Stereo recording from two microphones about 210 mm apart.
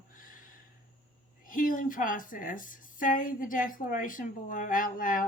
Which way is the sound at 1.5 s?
40° left (ahead or behind).